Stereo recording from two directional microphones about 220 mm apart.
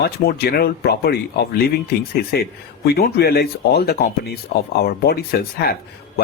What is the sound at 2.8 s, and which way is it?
Speech, 45° left (ahead or behind).